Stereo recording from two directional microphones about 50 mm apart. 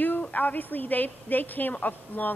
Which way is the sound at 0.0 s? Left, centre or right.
Left.